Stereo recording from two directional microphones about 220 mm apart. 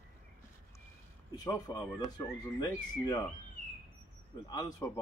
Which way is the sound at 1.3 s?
15° left (ahead or behind).